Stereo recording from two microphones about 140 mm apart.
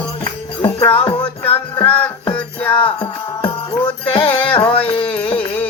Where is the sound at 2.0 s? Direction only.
10° left (ahead or behind).